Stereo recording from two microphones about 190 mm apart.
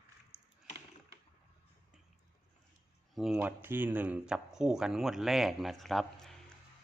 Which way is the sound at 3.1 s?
Centre (ahead or behind).